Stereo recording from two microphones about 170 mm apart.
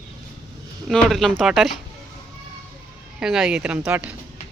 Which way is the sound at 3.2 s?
5° right (ahead or behind).